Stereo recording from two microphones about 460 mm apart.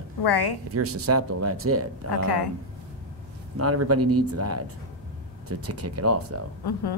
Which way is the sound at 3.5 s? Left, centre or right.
Right.